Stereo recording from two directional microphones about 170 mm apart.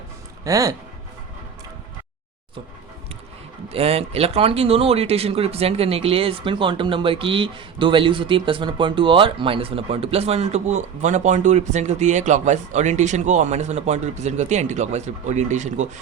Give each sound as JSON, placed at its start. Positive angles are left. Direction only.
{"t": 0.4, "sound": "speech", "side_deg": -20}
{"t": 3.7, "sound": "speech", "side_deg": -35}